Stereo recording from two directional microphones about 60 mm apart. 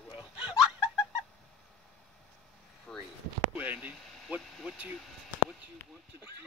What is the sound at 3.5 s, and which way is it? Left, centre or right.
Speech, right.